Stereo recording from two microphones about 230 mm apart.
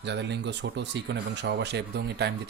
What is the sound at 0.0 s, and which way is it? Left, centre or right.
Speech, right.